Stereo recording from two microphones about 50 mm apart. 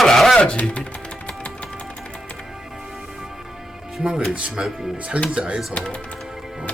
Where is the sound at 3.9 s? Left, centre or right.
Centre.